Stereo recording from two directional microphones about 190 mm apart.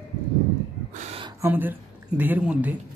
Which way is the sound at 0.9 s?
40° right (ahead or behind).